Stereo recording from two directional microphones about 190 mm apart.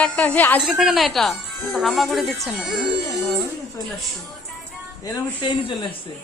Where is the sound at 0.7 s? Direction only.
Centre (ahead or behind).